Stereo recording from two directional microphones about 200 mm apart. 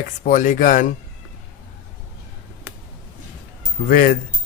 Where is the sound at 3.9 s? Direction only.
45° left (ahead or behind).